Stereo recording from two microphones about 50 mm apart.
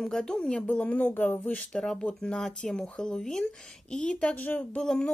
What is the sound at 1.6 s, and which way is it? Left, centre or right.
A woman's voice, centre.